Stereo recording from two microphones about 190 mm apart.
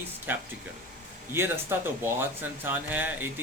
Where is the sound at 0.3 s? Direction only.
10° right (ahead or behind).